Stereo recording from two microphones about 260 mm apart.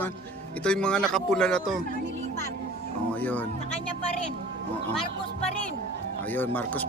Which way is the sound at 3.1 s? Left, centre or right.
Centre.